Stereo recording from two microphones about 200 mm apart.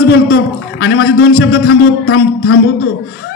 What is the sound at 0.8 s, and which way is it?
A man's voice, 85° left.